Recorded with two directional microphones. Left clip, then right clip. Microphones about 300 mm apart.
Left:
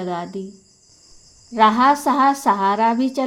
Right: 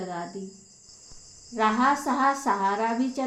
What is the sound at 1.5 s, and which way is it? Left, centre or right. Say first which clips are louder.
A woman's voice: left 9 dB; left.